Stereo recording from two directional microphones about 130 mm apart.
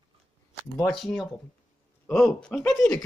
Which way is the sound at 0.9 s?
Centre (ahead or behind).